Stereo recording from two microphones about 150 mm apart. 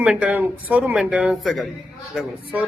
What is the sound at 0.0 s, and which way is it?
Speech, 5° right (ahead or behind).